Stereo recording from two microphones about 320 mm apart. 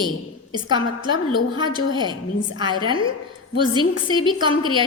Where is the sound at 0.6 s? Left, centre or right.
Centre.